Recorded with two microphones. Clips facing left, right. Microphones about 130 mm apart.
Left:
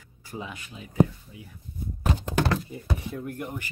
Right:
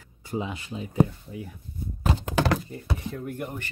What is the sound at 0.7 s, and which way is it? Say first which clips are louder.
Speech: right 9 dB; 35° right (ahead or behind).